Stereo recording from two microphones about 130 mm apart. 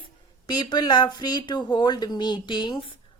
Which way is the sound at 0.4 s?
35° left (ahead or behind).